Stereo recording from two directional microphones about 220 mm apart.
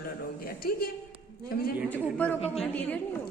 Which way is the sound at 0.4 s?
40° left (ahead or behind).